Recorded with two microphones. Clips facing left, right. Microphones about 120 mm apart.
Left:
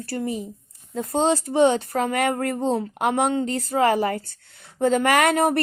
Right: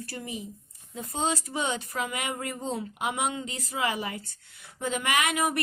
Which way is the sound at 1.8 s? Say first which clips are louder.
Left 10 dB; 45° left (ahead or behind).